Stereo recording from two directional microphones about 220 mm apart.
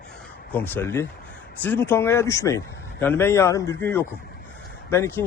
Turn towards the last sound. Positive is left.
turn(degrees=10)  # may be behind; listen again after turning